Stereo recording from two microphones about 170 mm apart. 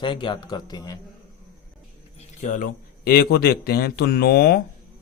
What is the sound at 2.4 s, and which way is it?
A man's voice, 50° left (ahead or behind).